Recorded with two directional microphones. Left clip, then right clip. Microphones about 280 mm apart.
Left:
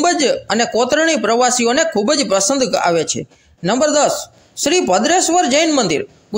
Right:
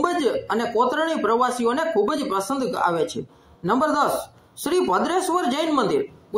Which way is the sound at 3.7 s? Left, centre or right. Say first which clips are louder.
Left 6 dB; left.